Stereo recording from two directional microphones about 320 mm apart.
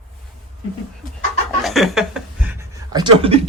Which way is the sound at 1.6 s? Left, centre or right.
Centre.